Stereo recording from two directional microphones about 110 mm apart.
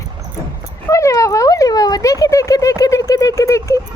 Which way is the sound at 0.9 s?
25° left (ahead or behind).